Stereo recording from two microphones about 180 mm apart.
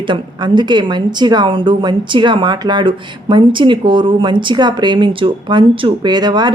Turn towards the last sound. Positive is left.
turn(degrees=-25)  # may be behind; listen again after turning